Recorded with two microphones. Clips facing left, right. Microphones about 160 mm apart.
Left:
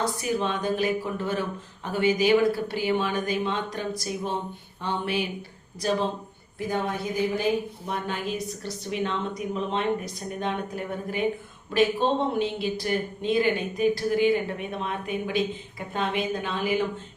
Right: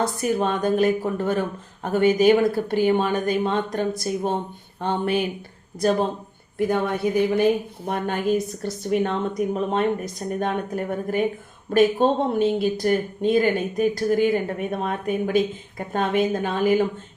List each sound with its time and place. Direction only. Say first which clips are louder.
0.2 s speech: right 5 dB; 50° right (ahead or behind)
6.7 s a woman's voice: right 5 dB; 60° right (ahead or behind); by 16.8 s 45° right (ahead or behind)